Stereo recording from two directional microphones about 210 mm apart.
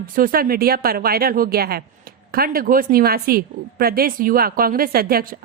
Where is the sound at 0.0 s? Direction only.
45° right (ahead or behind).